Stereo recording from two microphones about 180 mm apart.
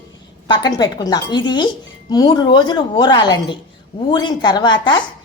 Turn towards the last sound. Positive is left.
turn(degrees=25)  # may be behind; listen again after turning